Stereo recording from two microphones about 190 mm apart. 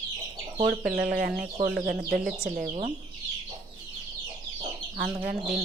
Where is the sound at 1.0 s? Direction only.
55° right (ahead or behind).